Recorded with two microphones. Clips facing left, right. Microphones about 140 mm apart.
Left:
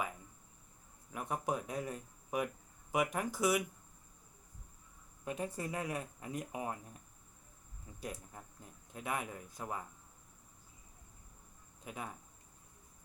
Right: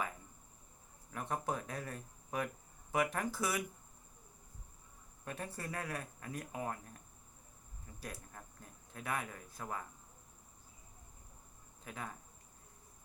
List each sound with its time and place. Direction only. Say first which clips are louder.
1.1 s speech: left 1 dB; 10° left (ahead or behind)
5.2 s speech: left 5 dB; 15° left (ahead or behind)
8.0 s speech: left 4 dB; 15° left (ahead or behind)
11.9 s speech: left 1 dB; 15° left (ahead or behind)